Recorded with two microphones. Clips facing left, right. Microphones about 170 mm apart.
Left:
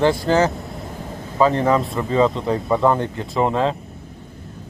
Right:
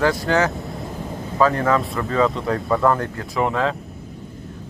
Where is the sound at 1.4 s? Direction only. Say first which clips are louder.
Left 2 dB; 25° left (ahead or behind).